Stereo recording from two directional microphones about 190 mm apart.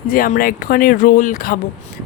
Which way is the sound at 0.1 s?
50° left (ahead or behind).